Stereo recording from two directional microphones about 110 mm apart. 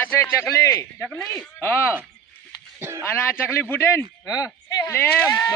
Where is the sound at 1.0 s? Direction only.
5° left (ahead or behind).